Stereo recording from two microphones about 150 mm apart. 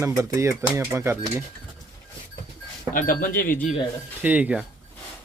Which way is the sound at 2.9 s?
65° left (ahead or behind).